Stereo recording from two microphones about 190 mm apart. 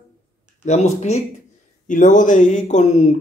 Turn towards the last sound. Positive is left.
turn(degrees=40)  # may be behind; listen again after turning